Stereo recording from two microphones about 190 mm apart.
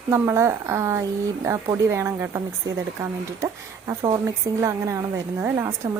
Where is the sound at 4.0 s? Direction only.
20° right (ahead or behind).